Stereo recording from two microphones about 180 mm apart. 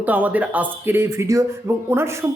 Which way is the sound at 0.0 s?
10° right (ahead or behind).